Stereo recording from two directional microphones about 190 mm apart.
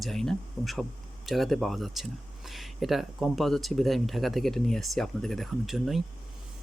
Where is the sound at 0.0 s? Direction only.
Centre (ahead or behind).